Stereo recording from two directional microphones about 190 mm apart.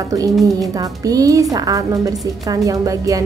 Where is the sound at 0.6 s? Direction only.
20° right (ahead or behind).